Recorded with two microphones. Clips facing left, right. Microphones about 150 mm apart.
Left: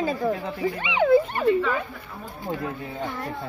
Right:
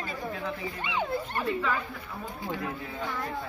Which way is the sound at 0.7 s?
70° left (ahead or behind).